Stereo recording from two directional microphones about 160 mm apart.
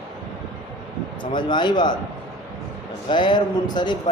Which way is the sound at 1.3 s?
30° left (ahead or behind).